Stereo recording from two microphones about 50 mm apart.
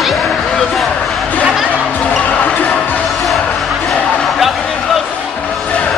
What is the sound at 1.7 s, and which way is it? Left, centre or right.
Basketball bounce, left.